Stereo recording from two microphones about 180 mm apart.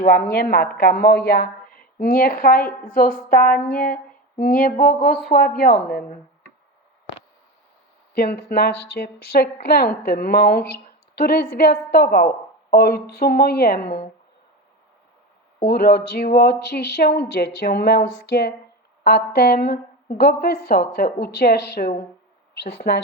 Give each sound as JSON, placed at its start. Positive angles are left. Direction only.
{"t": 0.1, "sound": "speech", "side_deg": 60}
{"t": 8.4, "sound": "speech", "side_deg": 60}
{"t": 15.6, "sound": "a woman's voice", "side_deg": 60}